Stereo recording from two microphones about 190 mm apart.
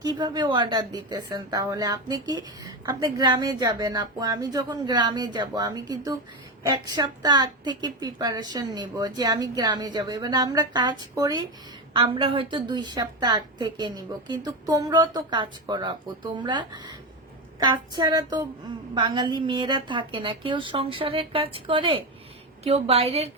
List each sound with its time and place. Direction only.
0.0 s a woman's voice: 20° right (ahead or behind)